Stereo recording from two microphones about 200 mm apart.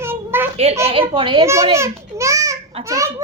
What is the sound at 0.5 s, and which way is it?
Speech, 30° right (ahead or behind).